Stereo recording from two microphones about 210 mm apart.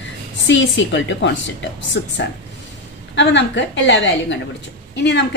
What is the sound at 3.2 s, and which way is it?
A woman's voice, 60° left (ahead or behind).